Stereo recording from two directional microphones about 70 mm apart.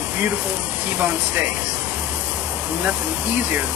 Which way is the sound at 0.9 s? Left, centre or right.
Centre.